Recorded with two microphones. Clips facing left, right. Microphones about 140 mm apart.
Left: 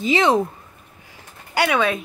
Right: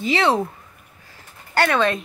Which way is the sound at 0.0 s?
15° left (ahead or behind).